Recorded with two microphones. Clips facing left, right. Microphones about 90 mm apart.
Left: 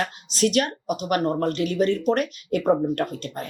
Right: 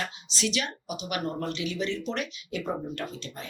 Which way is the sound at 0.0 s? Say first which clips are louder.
Left 9 dB; 45° left (ahead or behind).